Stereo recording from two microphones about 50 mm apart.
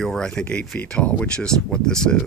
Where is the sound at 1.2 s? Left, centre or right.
Centre.